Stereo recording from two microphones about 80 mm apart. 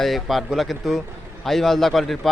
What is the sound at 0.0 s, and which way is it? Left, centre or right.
A man's voice, centre.